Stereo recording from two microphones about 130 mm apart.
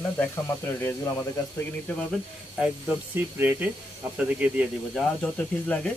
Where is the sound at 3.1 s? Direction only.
15° right (ahead or behind).